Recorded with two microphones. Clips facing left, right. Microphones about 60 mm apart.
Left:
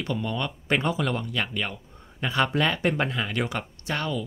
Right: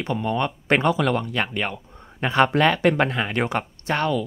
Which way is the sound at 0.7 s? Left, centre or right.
Right.